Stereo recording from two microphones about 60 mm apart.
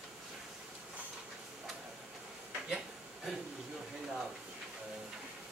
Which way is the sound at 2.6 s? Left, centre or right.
Centre.